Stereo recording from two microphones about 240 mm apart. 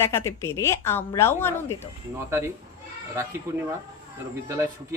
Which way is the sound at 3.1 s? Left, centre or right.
Centre.